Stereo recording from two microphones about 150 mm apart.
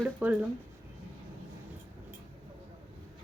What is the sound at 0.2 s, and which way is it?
Speech, 10° right (ahead or behind).